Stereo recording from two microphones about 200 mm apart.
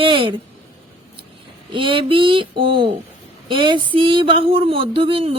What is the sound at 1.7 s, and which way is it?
Speech, 25° right (ahead or behind).